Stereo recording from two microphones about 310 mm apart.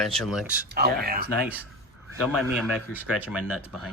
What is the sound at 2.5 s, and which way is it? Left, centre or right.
Speech, centre.